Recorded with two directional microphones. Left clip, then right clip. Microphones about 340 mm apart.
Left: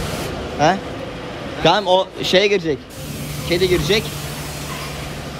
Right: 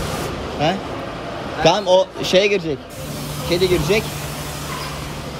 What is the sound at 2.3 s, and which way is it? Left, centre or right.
Speech, left.